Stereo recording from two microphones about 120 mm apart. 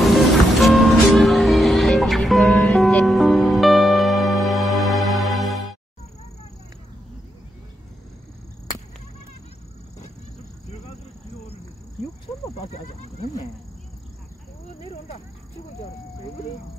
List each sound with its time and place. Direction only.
0.0 s music: centre (ahead or behind)
12.5 s wild animals: 60° left (ahead or behind)
14.8 s a sound: 60° left (ahead or behind)